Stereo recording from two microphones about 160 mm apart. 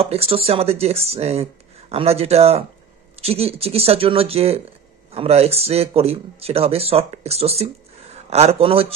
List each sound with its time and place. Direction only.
0.0 s speech: 40° right (ahead or behind)